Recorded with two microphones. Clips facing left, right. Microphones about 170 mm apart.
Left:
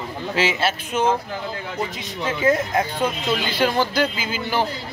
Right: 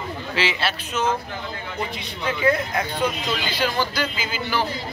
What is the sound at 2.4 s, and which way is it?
Speech, 20° left (ahead or behind).